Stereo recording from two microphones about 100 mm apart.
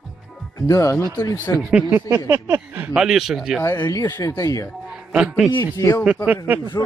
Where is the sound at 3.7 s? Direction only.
45° left (ahead or behind).